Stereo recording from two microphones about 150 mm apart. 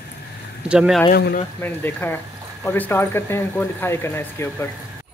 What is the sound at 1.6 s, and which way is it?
Speech, 15° left (ahead or behind).